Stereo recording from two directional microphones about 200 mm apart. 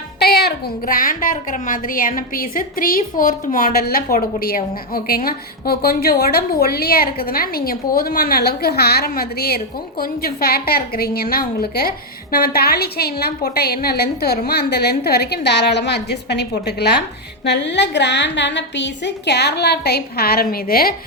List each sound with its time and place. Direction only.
0.2 s a woman's voice: 55° left (ahead or behind)